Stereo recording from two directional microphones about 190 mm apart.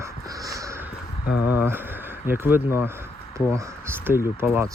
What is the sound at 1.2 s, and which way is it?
Speech, 55° left (ahead or behind).